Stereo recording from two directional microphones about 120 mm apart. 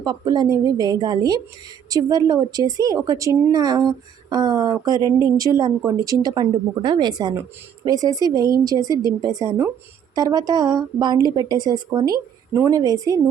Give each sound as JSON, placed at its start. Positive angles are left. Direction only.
{"t": 0.0, "sound": "speech", "side_deg": -35}